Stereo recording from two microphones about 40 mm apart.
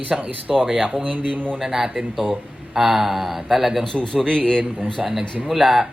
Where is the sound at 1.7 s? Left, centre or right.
Centre.